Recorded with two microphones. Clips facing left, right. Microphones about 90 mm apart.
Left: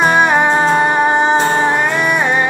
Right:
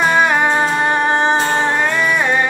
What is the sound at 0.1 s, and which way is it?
Music, 20° left (ahead or behind).